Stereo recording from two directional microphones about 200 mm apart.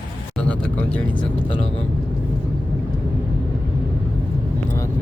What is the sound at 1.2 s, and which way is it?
Speech, 25° left (ahead or behind).